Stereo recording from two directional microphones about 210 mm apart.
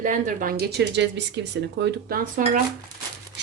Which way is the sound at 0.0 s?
40° right (ahead or behind).